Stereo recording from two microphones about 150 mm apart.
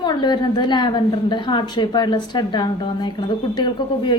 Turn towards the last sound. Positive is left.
turn(degrees=30)  # may be behind; listen again after turning